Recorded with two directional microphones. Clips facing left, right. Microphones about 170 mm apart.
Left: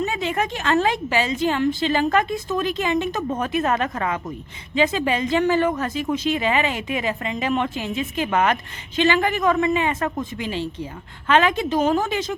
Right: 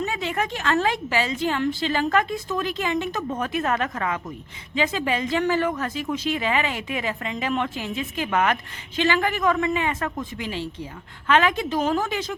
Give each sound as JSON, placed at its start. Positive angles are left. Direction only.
{"t": 0.0, "sound": "a woman's voice", "side_deg": 20}